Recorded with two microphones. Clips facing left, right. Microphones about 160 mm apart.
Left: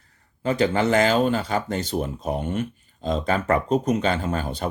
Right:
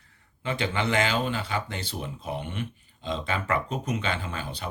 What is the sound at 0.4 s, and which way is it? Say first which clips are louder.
Speech: left 8 dB; 40° left (ahead or behind).